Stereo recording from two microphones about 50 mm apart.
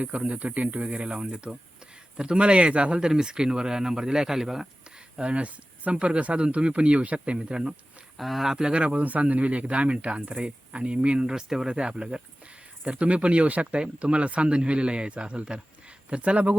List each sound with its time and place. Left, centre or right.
0.0 s a man's voice: right; by 4.6 s centre
5.1 s speech: right
8.2 s speech: centre; by 16.6 s right